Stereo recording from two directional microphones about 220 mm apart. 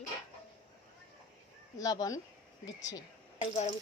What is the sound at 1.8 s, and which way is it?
A woman's voice, 15° left (ahead or behind).